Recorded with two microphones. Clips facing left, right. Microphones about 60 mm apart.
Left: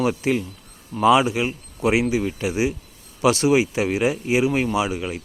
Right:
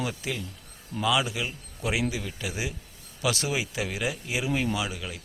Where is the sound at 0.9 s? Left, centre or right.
Left.